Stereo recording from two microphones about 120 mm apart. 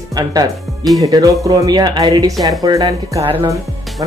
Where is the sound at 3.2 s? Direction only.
45° right (ahead or behind).